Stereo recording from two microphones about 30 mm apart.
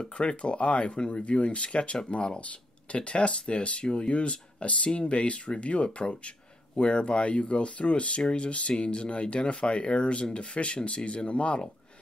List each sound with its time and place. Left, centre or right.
0.2 s speech: left
8.2 s speech: left
8.5 s speech: left